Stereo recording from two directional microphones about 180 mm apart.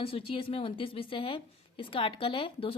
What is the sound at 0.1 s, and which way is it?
A woman's voice, 30° left (ahead or behind).